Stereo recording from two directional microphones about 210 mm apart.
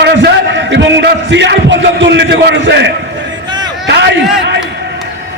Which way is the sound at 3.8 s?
55° right (ahead or behind).